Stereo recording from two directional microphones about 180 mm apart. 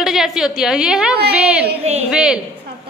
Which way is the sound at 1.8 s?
35° right (ahead or behind).